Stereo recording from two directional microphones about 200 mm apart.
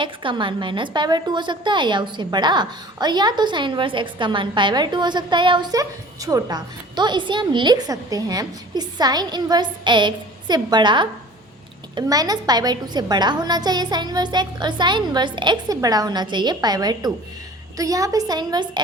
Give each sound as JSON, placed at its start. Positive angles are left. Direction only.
{"t": 0.0, "sound": "a woman's voice", "side_deg": -25}